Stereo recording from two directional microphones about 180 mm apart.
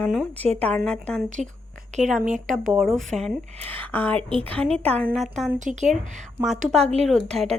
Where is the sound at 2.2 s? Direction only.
45° right (ahead or behind).